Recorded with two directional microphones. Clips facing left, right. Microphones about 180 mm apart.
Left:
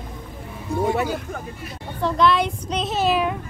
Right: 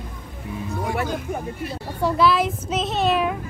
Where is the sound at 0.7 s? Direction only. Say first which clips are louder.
Left 5 dB; 25° left (ahead or behind).